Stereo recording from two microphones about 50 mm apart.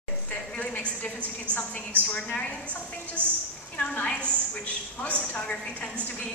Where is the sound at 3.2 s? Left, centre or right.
Right.